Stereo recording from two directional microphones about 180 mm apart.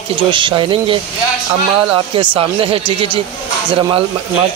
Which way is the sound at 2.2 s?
30° right (ahead or behind).